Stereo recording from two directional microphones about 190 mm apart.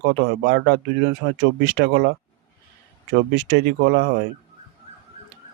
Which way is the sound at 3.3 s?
65° right (ahead or behind).